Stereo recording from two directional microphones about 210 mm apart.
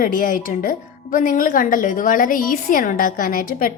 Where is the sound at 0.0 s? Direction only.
40° left (ahead or behind).